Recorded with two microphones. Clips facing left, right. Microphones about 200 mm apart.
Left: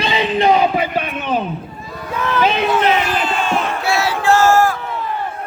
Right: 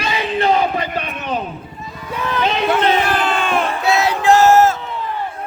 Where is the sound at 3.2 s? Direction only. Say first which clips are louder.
Even; 55° right (ahead or behind).